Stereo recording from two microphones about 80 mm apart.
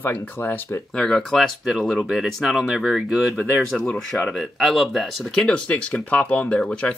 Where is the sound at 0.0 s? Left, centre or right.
Left.